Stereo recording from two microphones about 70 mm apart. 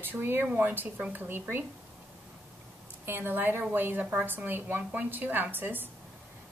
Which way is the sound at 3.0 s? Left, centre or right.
Right.